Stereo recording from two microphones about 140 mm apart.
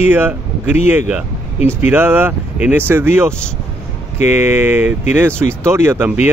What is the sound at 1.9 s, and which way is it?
Speech, 15° right (ahead or behind).